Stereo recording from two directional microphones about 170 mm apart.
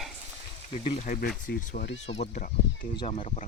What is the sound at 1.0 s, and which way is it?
Speech, 55° left (ahead or behind).